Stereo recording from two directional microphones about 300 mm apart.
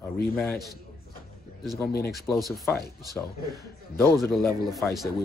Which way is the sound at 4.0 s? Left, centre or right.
Centre.